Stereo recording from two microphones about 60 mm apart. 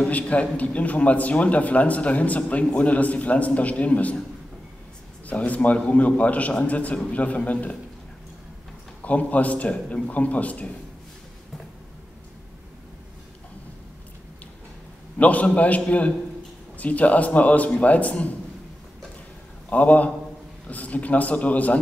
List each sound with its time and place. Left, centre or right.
0.0 s a man's voice: left
5.2 s a man's voice: left
9.0 s a man's voice: left
15.1 s a man's voice: left
19.7 s a man's voice: left